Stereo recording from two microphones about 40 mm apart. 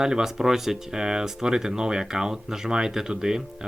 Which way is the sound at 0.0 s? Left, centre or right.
Centre.